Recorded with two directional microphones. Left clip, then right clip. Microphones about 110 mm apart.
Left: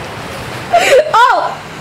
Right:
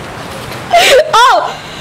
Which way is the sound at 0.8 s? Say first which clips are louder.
Right 2 dB; 45° right (ahead or behind).